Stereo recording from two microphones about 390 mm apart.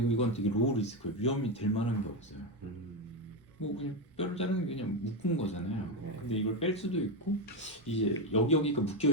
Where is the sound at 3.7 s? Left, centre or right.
Centre.